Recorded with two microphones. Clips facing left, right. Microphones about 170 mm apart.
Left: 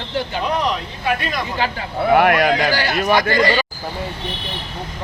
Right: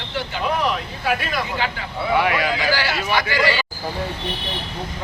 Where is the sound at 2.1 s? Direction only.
55° left (ahead or behind).